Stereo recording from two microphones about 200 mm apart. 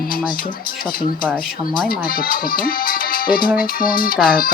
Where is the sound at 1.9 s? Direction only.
45° left (ahead or behind).